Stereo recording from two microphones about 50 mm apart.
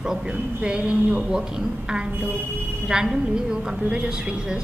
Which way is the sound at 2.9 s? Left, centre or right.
Centre.